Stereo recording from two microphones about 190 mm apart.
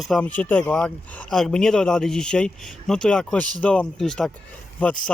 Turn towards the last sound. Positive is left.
turn(degrees=10)  # may be behind; listen again after turning